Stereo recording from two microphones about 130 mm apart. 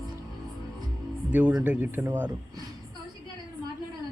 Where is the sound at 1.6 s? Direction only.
15° right (ahead or behind).